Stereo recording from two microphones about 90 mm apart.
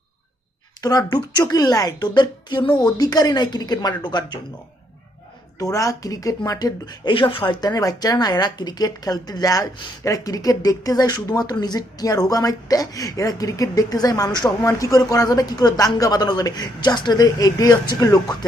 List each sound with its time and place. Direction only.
0.8 s speech: 45° left (ahead or behind)
2.7 s speech: 45° left (ahead or behind)
5.5 s speech: 40° left (ahead or behind)
7.1 s speech: 75° left (ahead or behind)
7.6 s speech: 45° left (ahead or behind)